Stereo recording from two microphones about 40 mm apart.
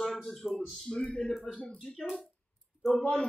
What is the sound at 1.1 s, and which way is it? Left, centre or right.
Speech, left.